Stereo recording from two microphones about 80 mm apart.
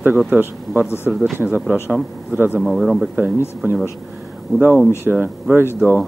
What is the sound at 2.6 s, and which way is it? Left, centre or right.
Speech, centre.